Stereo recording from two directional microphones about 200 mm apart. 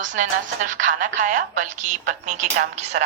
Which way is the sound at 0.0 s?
40° right (ahead or behind).